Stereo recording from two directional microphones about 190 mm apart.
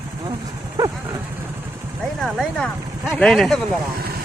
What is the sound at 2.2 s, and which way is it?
Speech, centre (ahead or behind).